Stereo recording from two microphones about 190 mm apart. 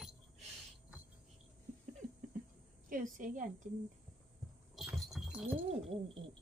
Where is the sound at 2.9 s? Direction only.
45° right (ahead or behind).